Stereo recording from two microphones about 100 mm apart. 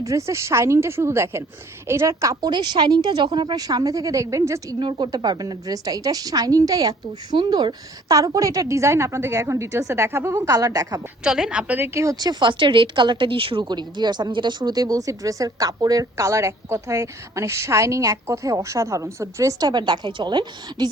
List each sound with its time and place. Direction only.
0.0 s a woman's voice: 30° right (ahead or behind)
4.8 s a woman's voice: 50° right (ahead or behind)
11.2 s a woman's voice: 5° right (ahead or behind)
11.9 s a woman's voice: 30° right (ahead or behind)
12.3 s a woman's voice: 50° right (ahead or behind)